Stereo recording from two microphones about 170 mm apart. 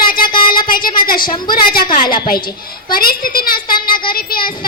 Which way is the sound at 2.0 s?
60° left (ahead or behind).